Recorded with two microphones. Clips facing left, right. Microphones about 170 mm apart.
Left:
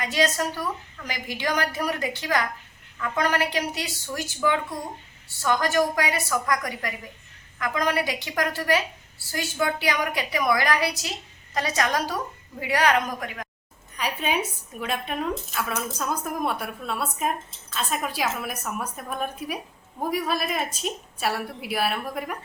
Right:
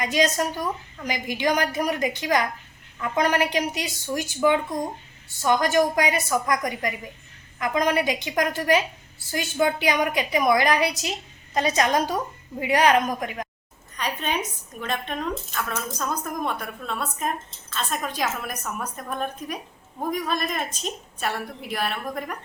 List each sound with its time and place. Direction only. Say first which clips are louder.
0.0 s a woman's voice: right 2 dB; 20° right (ahead or behind)
13.9 s a woman's voice: left 1 dB; 5° left (ahead or behind)